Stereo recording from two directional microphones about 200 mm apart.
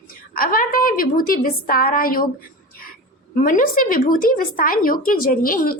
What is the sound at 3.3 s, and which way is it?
Speech, 40° left (ahead or behind).